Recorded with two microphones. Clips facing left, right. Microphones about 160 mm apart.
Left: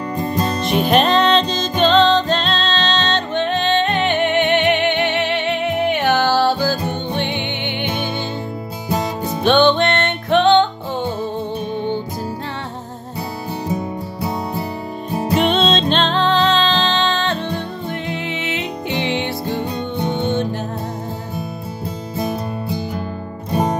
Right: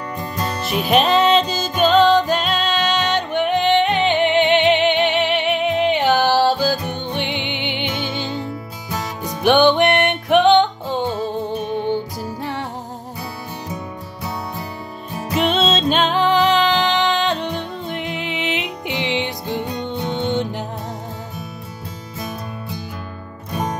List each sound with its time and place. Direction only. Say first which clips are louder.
0.6 s music: left 1 dB; 5° right (ahead or behind)
8.8 s music: left 6 dB; 30° left (ahead or behind)
9.4 s music: even; 15° right (ahead or behind)
15.0 s music: left 7 dB; 30° left (ahead or behind)
15.5 s music: left 1 dB; 5° right (ahead or behind)
23.5 s music: left 6 dB; 30° left (ahead or behind)